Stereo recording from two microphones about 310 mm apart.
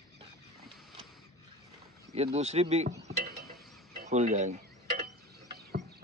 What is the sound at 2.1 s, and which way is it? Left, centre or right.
Speech, right.